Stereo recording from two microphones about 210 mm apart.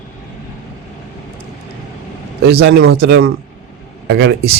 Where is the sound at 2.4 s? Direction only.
50° right (ahead or behind).